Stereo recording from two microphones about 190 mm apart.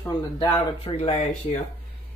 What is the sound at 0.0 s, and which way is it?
Speech, 20° left (ahead or behind).